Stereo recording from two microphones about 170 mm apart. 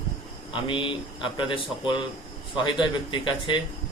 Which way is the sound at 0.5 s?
30° left (ahead or behind).